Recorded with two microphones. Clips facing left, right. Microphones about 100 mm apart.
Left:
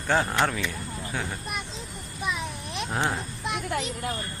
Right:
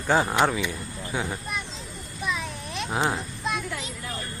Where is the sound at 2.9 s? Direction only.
10° right (ahead or behind).